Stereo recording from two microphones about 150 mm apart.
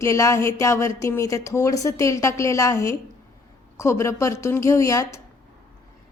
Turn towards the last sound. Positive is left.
turn(degrees=20)  # may be behind; listen again after turning